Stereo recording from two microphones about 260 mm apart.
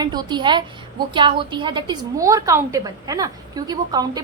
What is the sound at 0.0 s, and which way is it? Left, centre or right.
A woman's voice, centre.